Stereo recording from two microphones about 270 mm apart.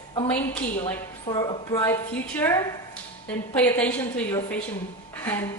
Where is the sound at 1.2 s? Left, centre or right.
Centre.